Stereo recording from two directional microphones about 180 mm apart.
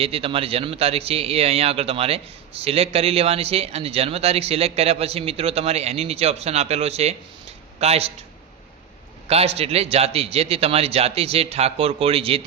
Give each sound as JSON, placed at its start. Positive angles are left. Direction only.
{"t": 0.0, "sound": "a man's voice", "side_deg": -30}
{"t": 9.2, "sound": "a man's voice", "side_deg": -35}